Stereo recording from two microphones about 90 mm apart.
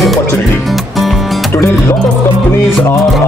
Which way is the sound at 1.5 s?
30° left (ahead or behind).